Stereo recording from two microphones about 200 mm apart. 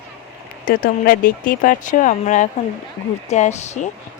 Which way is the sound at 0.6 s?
45° left (ahead or behind).